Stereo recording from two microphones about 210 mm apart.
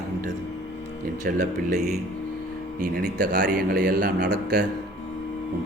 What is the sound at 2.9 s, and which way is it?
A man's voice, 50° right (ahead or behind).